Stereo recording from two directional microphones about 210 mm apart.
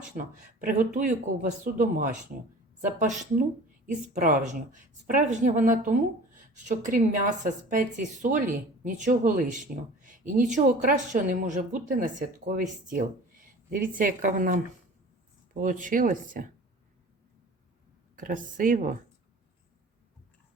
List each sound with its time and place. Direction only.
0.0 s a woman's voice: 40° right (ahead or behind)
15.6 s a woman's voice: 40° right (ahead or behind)
18.2 s a woman's voice: 40° right (ahead or behind)